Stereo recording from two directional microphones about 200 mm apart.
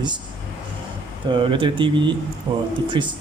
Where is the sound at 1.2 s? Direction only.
25° right (ahead or behind).